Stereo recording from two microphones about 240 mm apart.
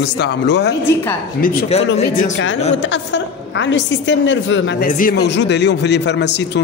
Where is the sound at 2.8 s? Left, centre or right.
Left.